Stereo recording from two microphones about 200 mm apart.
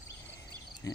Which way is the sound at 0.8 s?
15° left (ahead or behind).